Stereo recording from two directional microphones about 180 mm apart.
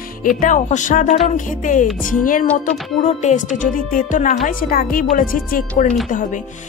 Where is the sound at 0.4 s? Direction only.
45° left (ahead or behind).